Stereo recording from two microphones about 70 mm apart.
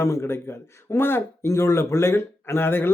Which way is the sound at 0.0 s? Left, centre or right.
Left.